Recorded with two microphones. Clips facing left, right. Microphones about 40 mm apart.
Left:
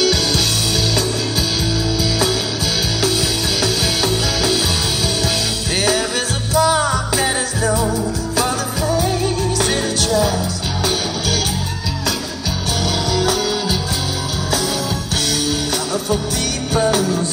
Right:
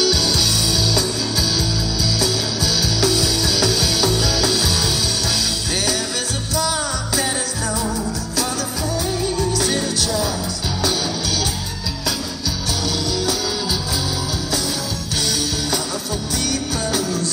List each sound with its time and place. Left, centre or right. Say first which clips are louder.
0.0 s music: left 2 dB; centre
3.0 s music: right 1 dB; centre
6.5 s music: left 8 dB; left
7.6 s music: left 7 dB; centre
9.5 s music: left 2 dB; left
13.1 s music: left 6 dB; left
15.1 s music: left 2 dB; left